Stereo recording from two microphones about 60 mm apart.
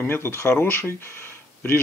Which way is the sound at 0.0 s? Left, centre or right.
Left.